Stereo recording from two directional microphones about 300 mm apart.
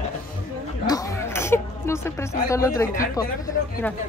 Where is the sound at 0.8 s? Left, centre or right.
Centre.